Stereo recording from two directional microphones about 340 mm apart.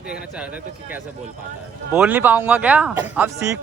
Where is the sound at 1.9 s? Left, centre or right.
Centre.